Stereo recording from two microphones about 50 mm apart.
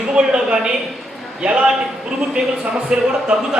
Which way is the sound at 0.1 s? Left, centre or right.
Centre.